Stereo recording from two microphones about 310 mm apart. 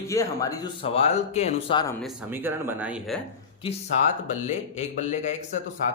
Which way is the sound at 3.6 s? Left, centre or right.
Left.